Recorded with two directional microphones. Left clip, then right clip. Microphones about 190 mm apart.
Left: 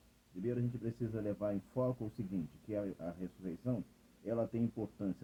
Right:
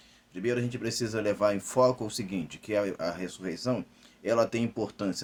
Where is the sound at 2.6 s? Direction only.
15° right (ahead or behind).